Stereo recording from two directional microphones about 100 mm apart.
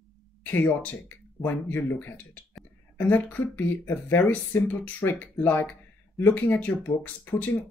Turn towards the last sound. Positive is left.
turn(degrees=20)  # may be behind; listen again after turning